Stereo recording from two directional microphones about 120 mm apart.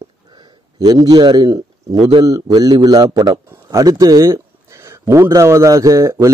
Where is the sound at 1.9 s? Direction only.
60° right (ahead or behind).